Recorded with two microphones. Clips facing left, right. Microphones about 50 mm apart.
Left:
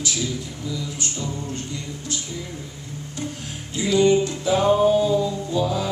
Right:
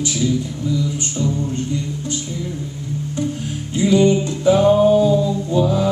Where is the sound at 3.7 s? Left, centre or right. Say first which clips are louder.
Right 3 dB; right.